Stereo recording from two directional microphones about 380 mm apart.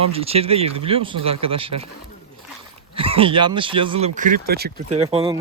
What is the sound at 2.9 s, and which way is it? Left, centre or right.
Speech, centre.